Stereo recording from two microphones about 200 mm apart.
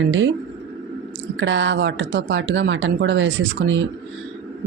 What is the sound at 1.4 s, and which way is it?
Speech, 70° right (ahead or behind).